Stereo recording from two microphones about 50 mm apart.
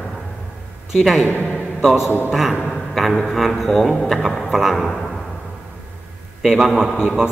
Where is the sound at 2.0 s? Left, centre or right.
Left.